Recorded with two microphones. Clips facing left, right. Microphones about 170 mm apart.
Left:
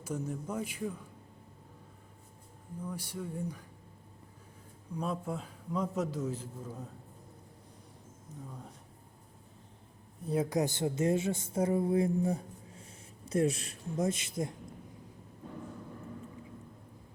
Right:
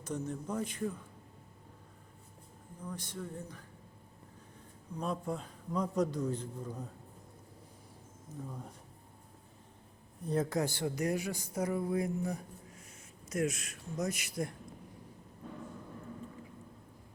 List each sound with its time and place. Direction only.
0.0 s a man's voice: 10° left (ahead or behind)
2.8 s a man's voice: 10° left (ahead or behind)
4.9 s a man's voice: 5° left (ahead or behind)
10.2 s speech: 10° left (ahead or behind)